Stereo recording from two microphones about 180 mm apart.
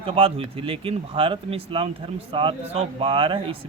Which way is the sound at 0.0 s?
30° right (ahead or behind).